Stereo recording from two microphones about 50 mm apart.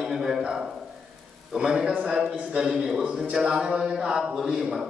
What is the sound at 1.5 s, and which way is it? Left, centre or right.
A man's voice, centre.